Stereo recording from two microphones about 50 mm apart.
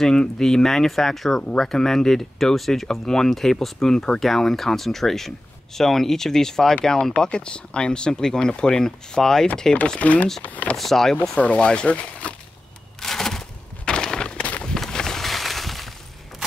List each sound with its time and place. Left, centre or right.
0.0 s speech: centre
9.9 s speech: left
10.8 s speech: centre
11.3 s speech: left
13.0 s a sound: centre